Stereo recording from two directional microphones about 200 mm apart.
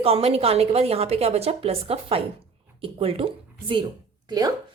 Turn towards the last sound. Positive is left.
turn(degrees=-20)  # may be behind; listen again after turning